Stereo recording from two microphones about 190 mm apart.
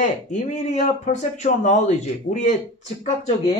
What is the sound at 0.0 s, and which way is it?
Speech, 40° left (ahead or behind).